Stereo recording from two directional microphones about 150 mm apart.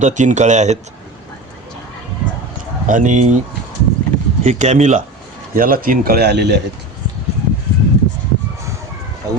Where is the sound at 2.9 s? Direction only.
55° right (ahead or behind).